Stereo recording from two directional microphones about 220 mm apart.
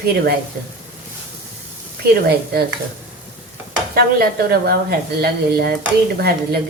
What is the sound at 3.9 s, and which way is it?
Speech, 45° right (ahead or behind).